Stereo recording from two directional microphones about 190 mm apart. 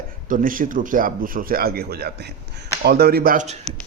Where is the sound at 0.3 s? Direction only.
45° right (ahead or behind).